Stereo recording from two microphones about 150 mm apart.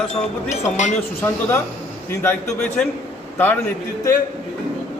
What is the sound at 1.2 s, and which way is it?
A man's voice, 15° left (ahead or behind).